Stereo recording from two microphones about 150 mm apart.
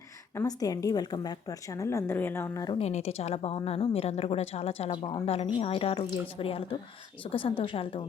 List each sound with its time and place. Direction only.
0.3 s a woman's voice: 25° left (ahead or behind)
2.7 s speech: 45° left (ahead or behind)
4.9 s a woman's voice: 30° left (ahead or behind)